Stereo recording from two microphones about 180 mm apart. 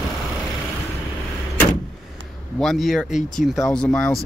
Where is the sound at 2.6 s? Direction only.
Centre (ahead or behind).